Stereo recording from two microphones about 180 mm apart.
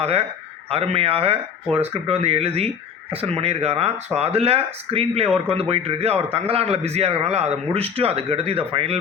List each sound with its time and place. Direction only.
0.0 s a man's voice: 35° right (ahead or behind)